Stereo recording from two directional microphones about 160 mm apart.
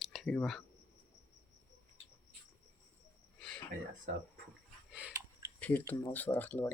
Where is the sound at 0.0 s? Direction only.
Centre (ahead or behind).